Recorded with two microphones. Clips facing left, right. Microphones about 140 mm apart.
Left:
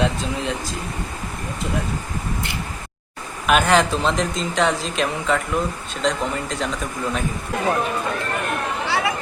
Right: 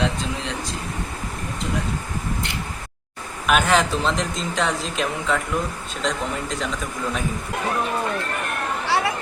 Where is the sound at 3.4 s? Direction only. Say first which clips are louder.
Left 2 dB; centre (ahead or behind).